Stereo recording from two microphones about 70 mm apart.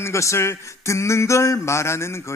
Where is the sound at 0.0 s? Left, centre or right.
Left.